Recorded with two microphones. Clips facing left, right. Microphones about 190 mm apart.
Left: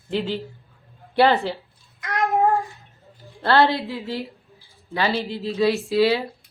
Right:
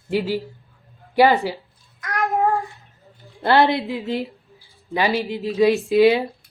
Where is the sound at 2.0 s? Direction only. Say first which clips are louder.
Even; 25° left (ahead or behind).